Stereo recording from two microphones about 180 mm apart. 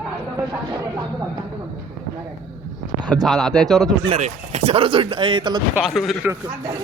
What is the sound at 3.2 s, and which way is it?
Speech, centre (ahead or behind).